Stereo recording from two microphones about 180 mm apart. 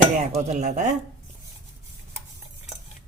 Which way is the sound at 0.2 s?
40° right (ahead or behind).